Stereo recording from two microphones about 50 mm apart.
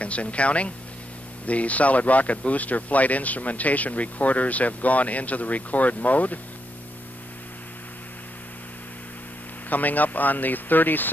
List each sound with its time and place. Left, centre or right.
0.0 s speech: left
9.7 s speech: left